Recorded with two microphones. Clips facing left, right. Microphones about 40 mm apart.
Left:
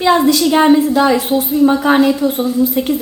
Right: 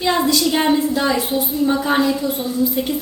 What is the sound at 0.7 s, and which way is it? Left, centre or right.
A woman's voice, left.